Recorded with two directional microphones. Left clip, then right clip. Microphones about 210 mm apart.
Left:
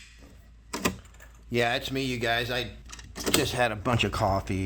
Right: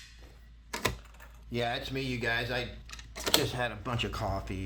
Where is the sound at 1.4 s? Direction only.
35° left (ahead or behind).